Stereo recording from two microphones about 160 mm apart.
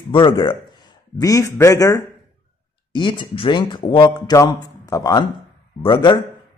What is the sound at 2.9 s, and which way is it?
Speech, 30° left (ahead or behind).